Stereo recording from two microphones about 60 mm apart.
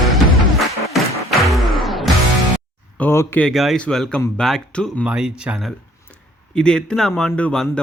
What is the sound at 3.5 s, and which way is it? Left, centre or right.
Speech, centre.